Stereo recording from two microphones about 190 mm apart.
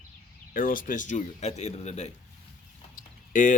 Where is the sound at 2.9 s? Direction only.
45° left (ahead or behind).